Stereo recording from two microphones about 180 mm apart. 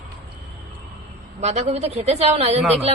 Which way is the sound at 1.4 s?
40° right (ahead or behind).